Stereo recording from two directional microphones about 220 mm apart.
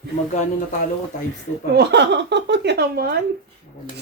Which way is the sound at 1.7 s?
50° right (ahead or behind).